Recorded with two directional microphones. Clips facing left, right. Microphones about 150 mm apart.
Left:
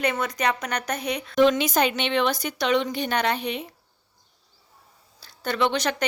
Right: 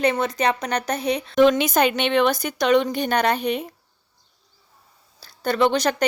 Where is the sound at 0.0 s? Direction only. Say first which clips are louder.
Right 4 dB; 30° right (ahead or behind).